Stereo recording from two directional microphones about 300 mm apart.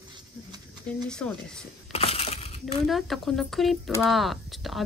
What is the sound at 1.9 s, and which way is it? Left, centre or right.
Crushing, centre.